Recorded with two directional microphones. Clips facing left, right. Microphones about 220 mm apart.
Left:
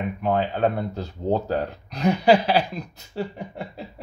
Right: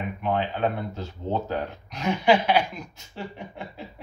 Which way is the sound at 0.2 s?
40° left (ahead or behind).